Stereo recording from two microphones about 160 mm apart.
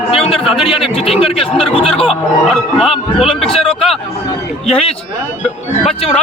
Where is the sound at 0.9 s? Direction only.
35° left (ahead or behind).